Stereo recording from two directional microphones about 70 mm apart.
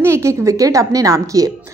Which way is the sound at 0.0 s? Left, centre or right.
Right.